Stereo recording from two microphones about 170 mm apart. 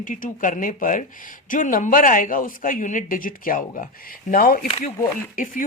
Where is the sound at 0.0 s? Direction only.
50° left (ahead or behind).